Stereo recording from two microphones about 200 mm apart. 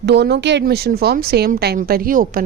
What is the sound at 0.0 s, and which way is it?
A woman's voice, 55° right (ahead or behind).